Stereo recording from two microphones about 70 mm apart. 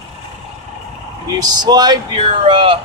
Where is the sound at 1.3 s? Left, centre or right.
Right.